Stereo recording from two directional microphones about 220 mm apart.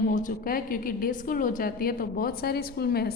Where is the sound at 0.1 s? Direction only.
35° left (ahead or behind).